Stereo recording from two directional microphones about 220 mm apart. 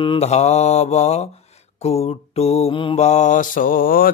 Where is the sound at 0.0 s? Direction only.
25° left (ahead or behind).